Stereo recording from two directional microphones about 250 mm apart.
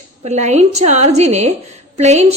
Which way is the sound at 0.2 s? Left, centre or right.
Right.